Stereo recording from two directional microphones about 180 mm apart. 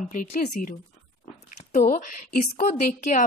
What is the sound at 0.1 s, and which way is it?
Speech, 45° left (ahead or behind).